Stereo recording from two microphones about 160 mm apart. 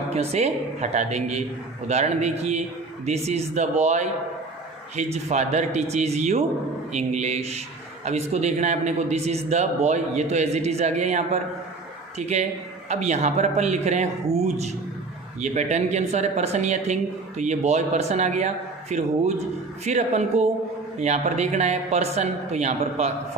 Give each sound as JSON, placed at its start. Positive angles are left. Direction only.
{"t": 0.1, "sound": "a woman's voice", "side_deg": -40}